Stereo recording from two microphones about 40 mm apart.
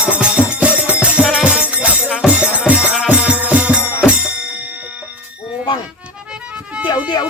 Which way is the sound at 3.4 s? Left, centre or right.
Right.